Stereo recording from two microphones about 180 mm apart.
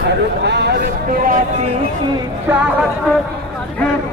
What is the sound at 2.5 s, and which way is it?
Speech, 10° right (ahead or behind).